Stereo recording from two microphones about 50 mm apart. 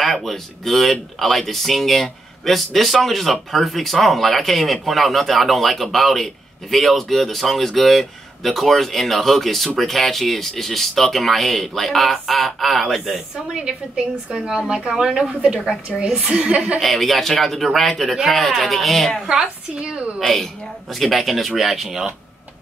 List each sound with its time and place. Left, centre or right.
0.0 s a man's voice: centre
13.6 s a woman's voice: centre
16.8 s a man's voice: centre
19.2 s a woman's voice: centre
20.2 s a man's voice: centre